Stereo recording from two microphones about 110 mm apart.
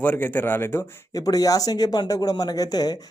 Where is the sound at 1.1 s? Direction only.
35° left (ahead or behind).